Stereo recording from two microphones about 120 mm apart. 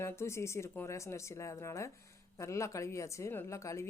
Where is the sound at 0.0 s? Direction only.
20° left (ahead or behind).